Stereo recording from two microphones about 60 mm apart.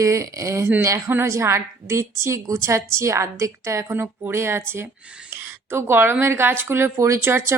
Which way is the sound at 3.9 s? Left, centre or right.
Right.